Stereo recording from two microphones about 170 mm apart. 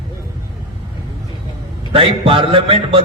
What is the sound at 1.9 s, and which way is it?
A man's voice, 30° right (ahead or behind).